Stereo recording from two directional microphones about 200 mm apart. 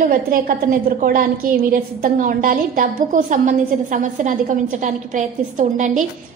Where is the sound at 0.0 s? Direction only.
45° right (ahead or behind).